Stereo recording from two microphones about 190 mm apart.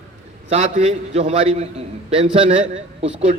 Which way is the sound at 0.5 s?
35° right (ahead or behind).